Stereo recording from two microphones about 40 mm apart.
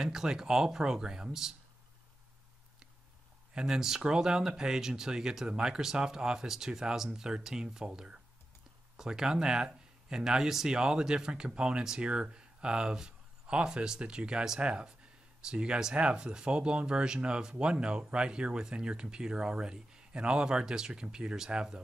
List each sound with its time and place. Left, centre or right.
0.0 s speech: centre
3.5 s speech: centre